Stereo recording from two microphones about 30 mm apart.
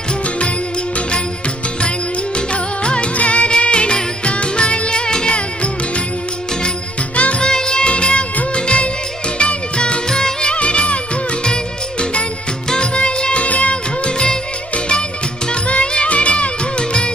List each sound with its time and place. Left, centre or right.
2.3 s music: left
3.2 s music: left
3.6 s music: left
7.2 s music: left
7.4 s music: left
10.0 s music: centre
10.5 s music of bollywood: left
12.0 s music: left
12.6 s music: left
13.5 s music: left
14.0 s music: left
15.7 s music: left